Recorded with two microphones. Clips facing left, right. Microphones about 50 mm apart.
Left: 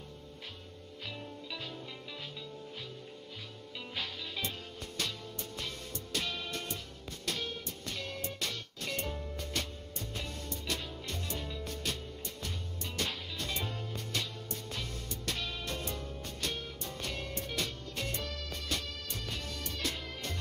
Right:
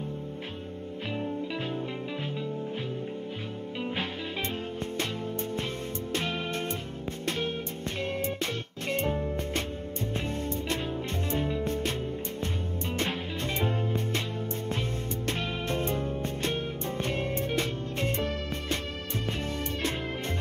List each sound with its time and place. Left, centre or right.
3.9 s music: right
6.1 s music: right
12.9 s music: right
19.8 s music: right